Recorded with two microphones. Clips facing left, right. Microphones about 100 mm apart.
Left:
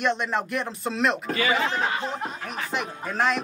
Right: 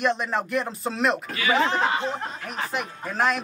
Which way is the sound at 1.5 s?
30° right (ahead or behind).